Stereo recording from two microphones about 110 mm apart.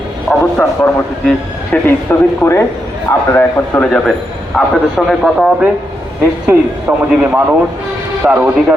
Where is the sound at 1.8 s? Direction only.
20° left (ahead or behind).